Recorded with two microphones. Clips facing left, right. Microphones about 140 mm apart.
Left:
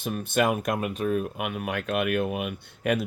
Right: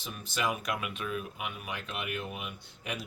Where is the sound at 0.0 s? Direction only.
55° left (ahead or behind).